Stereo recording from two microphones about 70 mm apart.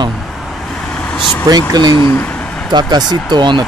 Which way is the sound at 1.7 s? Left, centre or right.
Right.